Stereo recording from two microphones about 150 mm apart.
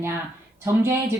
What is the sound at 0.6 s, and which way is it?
Speech, 20° right (ahead or behind).